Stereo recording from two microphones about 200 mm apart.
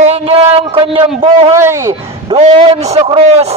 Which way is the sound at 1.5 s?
15° right (ahead or behind).